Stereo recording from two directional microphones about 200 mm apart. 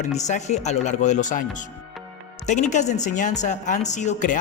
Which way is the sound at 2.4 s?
35° left (ahead or behind).